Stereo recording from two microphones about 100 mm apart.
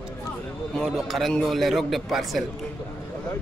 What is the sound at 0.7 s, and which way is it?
A man's voice, centre (ahead or behind).